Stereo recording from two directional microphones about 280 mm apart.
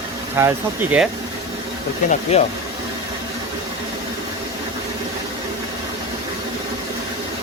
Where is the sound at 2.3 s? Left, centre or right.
Left.